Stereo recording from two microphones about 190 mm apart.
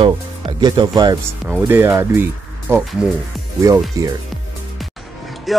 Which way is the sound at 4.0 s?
20° right (ahead or behind).